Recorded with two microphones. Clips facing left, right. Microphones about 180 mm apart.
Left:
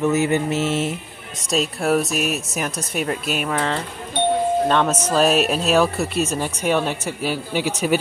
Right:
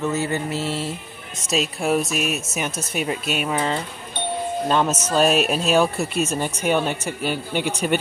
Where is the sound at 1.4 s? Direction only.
Centre (ahead or behind).